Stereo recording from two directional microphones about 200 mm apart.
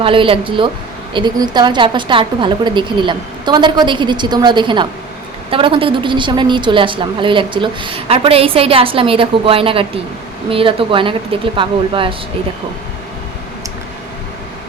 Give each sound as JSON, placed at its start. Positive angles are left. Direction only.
{"t": 0.0, "sound": "a woman's voice", "side_deg": -25}